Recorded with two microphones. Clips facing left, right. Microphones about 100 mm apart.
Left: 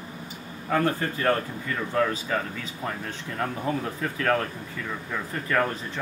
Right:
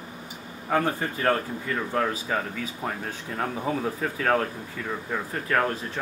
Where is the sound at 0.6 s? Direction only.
10° right (ahead or behind).